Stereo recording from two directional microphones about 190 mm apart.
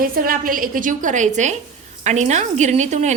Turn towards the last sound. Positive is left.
turn(degrees=-35)  # may be behind; listen again after turning